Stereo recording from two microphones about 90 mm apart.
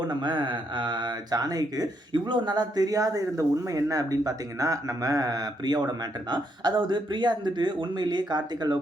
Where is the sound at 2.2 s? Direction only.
55° right (ahead or behind).